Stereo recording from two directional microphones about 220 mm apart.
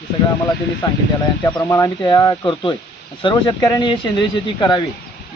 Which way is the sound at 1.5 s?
15° left (ahead or behind).